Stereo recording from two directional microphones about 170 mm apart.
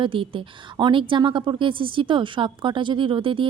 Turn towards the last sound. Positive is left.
turn(degrees=-30)  # may be behind; listen again after turning